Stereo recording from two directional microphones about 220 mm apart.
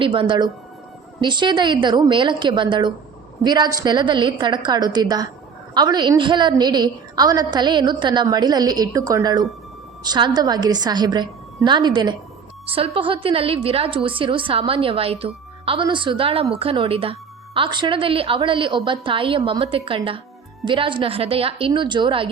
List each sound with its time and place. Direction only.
0.0 s a woman's voice: 25° right (ahead or behind)